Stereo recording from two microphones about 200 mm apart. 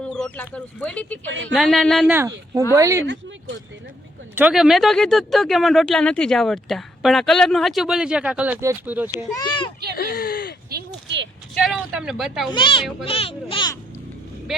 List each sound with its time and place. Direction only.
0.0 s speech: 5° left (ahead or behind)
1.3 s speech: 65° right (ahead or behind)
1.5 s speech: centre (ahead or behind)
2.7 s speech: 15° right (ahead or behind)
4.4 s speech: 5° right (ahead or behind)
9.3 s a child's voice: 20° left (ahead or behind)
10.0 s a sound: 50° left (ahead or behind)
10.7 s a sound: 55° right (ahead or behind)
11.5 s a sound: centre (ahead or behind)
12.5 s a child's voice: 25° left (ahead or behind)